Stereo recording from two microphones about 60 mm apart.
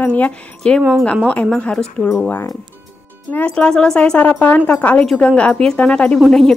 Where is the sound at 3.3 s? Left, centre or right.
Left.